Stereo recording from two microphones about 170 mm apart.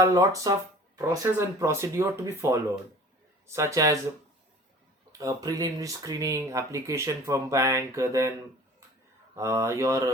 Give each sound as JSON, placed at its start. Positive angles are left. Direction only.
{"t": 0.0, "sound": "speech", "side_deg": -20}
{"t": 5.1, "sound": "speech", "side_deg": -20}
{"t": 9.3, "sound": "speech", "side_deg": -15}